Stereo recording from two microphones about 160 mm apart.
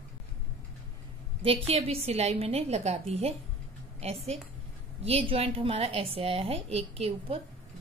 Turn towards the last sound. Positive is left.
turn(degrees=-40)  # may be behind; listen again after turning